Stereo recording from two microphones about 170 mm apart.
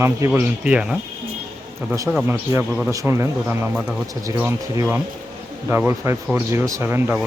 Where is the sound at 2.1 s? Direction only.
Centre (ahead or behind).